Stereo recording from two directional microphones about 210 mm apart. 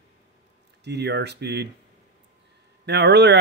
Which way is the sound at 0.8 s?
55° right (ahead or behind).